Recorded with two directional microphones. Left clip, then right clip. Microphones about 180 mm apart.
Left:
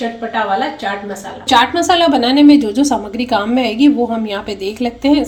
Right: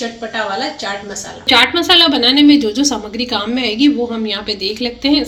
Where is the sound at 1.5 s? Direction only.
30° left (ahead or behind).